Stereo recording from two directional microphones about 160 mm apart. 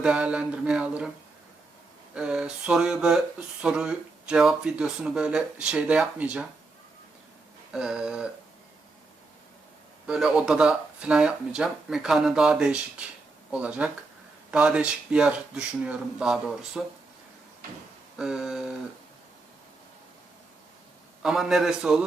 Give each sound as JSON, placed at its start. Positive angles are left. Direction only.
{"t": 0.0, "sound": "a sound", "side_deg": -5}
{"t": 2.1, "sound": "a sound", "side_deg": -5}
{"t": 3.6, "sound": "speech", "side_deg": -5}
{"t": 7.7, "sound": "speech", "side_deg": -5}
{"t": 10.1, "sound": "speech", "side_deg": -5}
{"t": 18.2, "sound": "speech", "side_deg": -5}
{"t": 21.2, "sound": "speech", "side_deg": -5}